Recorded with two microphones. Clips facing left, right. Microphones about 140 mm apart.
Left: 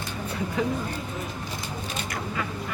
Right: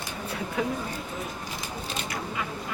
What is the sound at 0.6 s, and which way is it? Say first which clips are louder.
Speech: left 2 dB; 5° right (ahead or behind).